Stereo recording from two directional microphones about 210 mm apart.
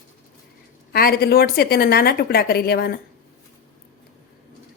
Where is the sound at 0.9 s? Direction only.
45° left (ahead or behind).